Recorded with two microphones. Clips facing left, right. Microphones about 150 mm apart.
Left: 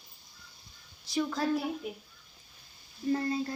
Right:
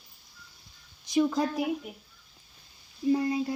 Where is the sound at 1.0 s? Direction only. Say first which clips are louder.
Right 5 dB; 20° right (ahead or behind).